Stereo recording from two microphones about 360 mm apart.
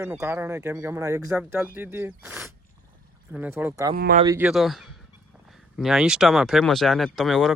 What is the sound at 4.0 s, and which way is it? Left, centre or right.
Speech, right.